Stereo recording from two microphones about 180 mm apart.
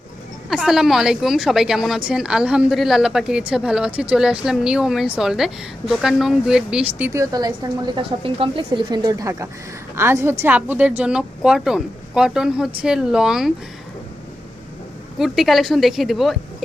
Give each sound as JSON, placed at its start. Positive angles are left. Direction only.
{"t": 0.5, "sound": "a woman's voice", "side_deg": -5}
{"t": 7.1, "sound": "a woman's voice", "side_deg": -20}
{"t": 15.2, "sound": "a woman's voice", "side_deg": 0}